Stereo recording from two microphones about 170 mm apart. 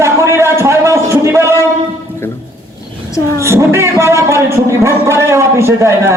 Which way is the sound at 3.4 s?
15° right (ahead or behind).